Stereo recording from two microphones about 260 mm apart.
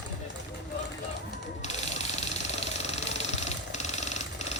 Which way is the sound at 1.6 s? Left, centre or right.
Left.